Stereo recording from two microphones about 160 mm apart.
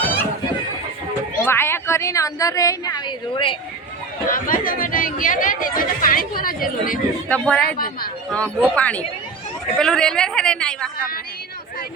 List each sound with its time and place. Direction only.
1.5 s a woman's voice: 15° left (ahead or behind); by 3.6 s 30° left (ahead or behind)
4.3 s speech: 60° left (ahead or behind)
7.3 s speech: 5° left (ahead or behind)